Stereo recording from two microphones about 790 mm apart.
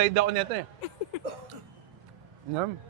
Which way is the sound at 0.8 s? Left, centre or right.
Left.